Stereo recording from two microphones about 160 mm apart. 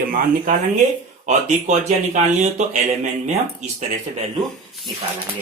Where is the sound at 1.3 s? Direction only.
45° right (ahead or behind).